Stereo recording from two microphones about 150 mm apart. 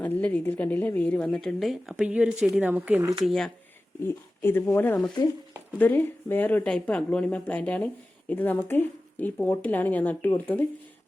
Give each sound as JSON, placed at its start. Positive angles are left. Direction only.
{"t": 0.0, "sound": "speech", "side_deg": 10}
{"t": 3.2, "sound": "speech", "side_deg": 5}
{"t": 4.0, "sound": "speech", "side_deg": 15}